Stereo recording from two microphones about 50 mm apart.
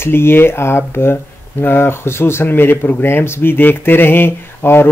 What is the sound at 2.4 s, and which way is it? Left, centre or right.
Speech, left.